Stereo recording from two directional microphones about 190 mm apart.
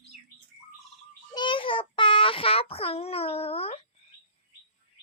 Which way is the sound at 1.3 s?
25° left (ahead or behind).